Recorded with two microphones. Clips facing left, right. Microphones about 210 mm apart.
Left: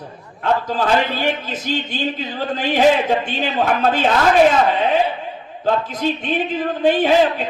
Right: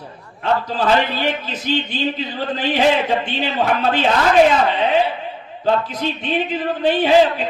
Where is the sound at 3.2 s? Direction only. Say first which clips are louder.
Even; 45° left (ahead or behind).